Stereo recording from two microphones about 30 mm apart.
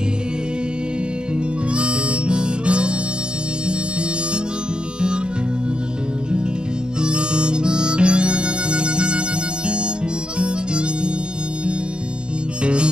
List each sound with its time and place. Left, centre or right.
1.7 s harmonica: right
7.0 s harmonica: right
12.6 s music: right